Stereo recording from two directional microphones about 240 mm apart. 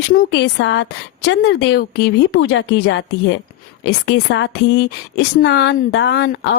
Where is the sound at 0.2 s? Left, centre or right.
Left.